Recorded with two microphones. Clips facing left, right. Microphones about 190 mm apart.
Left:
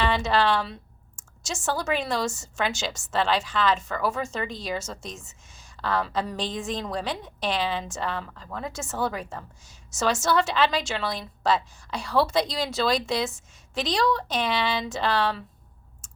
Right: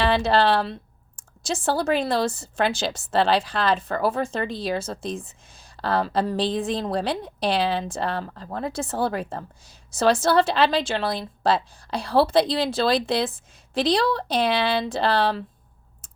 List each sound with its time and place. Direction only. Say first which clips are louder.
0.2 s a woman's voice: right 3 dB; 35° right (ahead or behind)